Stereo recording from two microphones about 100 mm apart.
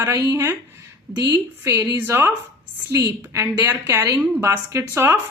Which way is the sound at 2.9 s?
35° right (ahead or behind).